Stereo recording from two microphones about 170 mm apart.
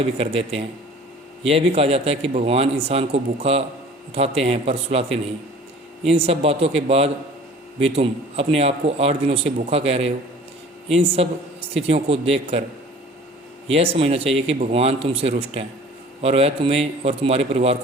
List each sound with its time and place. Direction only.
0.2 s a man's voice: 35° right (ahead or behind)
13.7 s a man's voice: 35° right (ahead or behind)